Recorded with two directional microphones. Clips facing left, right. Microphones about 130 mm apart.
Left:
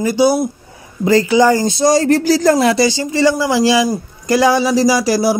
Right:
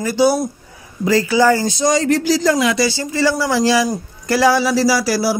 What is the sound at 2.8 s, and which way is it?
Speech, 20° left (ahead or behind).